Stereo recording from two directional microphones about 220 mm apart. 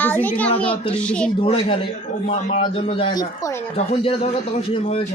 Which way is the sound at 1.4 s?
25° left (ahead or behind).